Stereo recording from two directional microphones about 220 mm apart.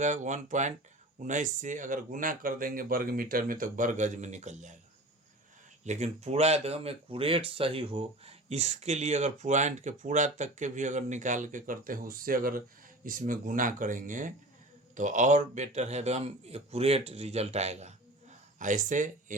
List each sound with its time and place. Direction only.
0.0 s speech: 35° right (ahead or behind)
5.8 s a man's voice: 30° right (ahead or behind)